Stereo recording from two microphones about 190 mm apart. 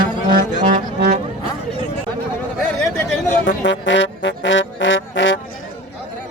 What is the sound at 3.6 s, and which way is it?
Music, 70° left (ahead or behind).